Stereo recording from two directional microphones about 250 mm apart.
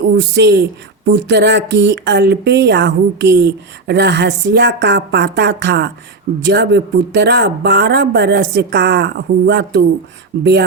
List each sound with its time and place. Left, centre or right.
0.2 s speech: right